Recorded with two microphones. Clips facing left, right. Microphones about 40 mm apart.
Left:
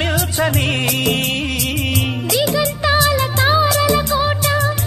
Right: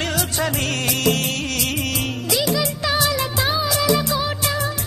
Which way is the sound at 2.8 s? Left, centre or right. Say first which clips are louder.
Left 8 dB; left.